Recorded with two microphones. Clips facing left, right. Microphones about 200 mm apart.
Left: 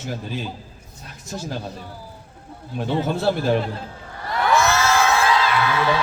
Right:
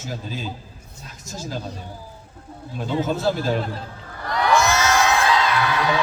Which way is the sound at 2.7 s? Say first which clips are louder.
Left 1 dB; 60° left (ahead or behind).